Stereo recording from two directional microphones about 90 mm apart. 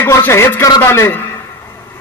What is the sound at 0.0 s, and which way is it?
A man's voice, 30° left (ahead or behind).